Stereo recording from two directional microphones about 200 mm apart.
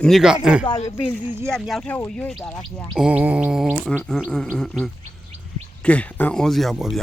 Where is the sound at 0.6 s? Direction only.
25° left (ahead or behind).